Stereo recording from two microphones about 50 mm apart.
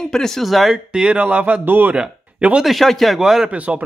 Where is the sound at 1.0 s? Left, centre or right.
Right.